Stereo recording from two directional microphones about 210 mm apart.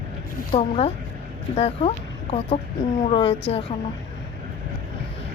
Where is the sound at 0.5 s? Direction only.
25° left (ahead or behind).